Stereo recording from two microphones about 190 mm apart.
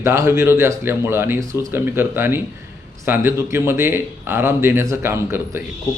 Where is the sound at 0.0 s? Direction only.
15° right (ahead or behind).